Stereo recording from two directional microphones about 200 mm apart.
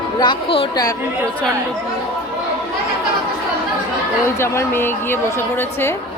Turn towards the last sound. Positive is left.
turn(degrees=10)  # may be behind; listen again after turning